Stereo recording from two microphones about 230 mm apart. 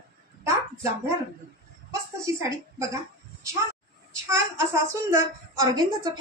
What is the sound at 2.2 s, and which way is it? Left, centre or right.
Speech, centre.